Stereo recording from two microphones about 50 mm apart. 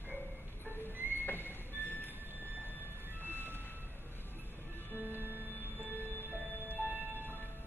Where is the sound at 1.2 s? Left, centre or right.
Left.